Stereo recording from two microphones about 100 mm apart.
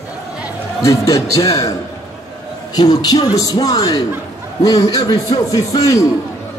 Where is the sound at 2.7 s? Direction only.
40° left (ahead or behind).